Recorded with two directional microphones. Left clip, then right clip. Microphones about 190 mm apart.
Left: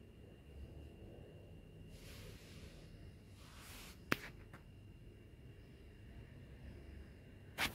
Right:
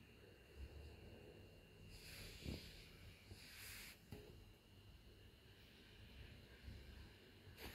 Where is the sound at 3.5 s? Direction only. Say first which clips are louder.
Left 1 dB; 55° left (ahead or behind).